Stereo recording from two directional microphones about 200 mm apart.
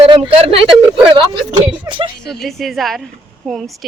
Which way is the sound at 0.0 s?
30° right (ahead or behind).